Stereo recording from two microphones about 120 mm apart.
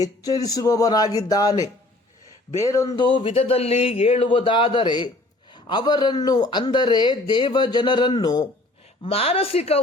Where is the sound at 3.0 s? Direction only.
45° left (ahead or behind).